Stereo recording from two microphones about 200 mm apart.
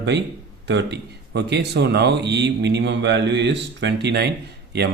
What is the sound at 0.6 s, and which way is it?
Speech, 60° right (ahead or behind).